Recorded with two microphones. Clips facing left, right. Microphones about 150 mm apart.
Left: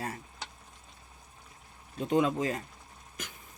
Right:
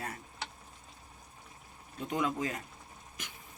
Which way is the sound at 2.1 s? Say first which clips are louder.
Left 6 dB; 25° left (ahead or behind).